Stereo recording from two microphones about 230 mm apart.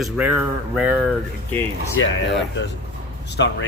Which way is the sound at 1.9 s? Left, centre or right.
Left.